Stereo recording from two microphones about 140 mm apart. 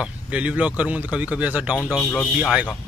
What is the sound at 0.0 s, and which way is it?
Speech, 10° right (ahead or behind).